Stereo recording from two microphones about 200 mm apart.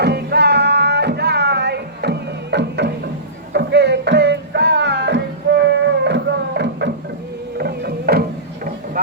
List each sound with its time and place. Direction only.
0.0 s music: 55° right (ahead or behind)